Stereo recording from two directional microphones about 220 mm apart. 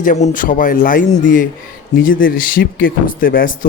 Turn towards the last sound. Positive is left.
turn(degrees=40)  # may be behind; listen again after turning